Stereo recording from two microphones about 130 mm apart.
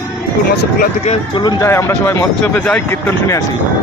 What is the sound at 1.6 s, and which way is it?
Speech, 20° left (ahead or behind).